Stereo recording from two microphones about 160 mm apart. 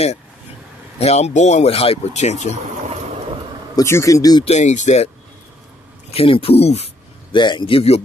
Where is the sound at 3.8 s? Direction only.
20° left (ahead or behind).